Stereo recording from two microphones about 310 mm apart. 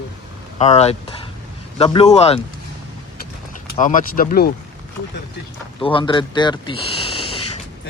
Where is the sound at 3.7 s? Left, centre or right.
Left.